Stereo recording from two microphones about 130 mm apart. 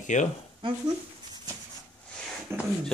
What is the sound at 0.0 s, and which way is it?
Speech, 70° left (ahead or behind).